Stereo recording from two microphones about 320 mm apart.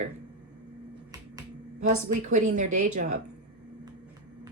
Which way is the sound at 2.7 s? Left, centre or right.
Right.